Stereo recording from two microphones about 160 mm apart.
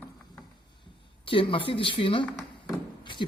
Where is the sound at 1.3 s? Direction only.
35° left (ahead or behind).